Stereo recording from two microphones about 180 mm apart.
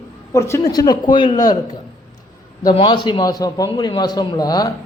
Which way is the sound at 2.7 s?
30° left (ahead or behind).